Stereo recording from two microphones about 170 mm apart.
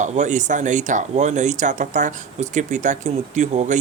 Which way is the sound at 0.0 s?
45° right (ahead or behind).